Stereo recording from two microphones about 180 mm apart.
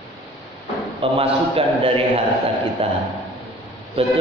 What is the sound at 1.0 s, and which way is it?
Mantra, 30° right (ahead or behind).